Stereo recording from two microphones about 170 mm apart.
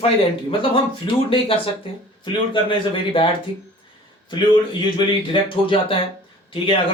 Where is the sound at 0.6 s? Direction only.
30° left (ahead or behind).